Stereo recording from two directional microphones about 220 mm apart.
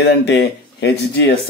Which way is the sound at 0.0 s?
50° left (ahead or behind).